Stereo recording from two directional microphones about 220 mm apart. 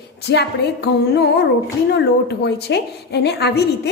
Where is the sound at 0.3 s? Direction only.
50° left (ahead or behind).